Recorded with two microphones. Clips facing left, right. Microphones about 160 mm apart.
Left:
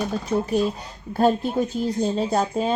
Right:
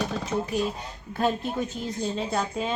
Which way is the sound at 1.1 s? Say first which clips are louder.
Left 6 dB; 40° left (ahead or behind).